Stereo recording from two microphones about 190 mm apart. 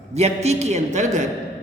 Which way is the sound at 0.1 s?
35° right (ahead or behind).